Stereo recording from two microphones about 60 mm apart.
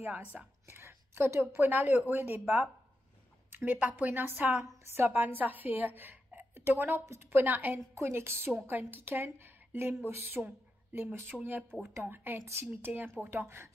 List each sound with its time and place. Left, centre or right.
0.0 s a woman's voice: right
0.7 s a sound: right
1.6 s a woman's voice: right
7.9 s a woman's voice: right